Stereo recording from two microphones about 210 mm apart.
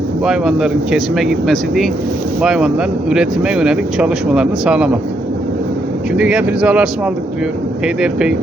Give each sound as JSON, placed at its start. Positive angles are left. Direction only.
{"t": 0.3, "sound": "speech", "side_deg": -5}
{"t": 6.1, "sound": "speech", "side_deg": -5}
{"t": 8.0, "sound": "speech", "side_deg": -5}